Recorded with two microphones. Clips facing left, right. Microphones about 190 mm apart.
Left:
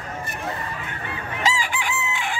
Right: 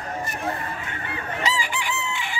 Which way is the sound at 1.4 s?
50° left (ahead or behind).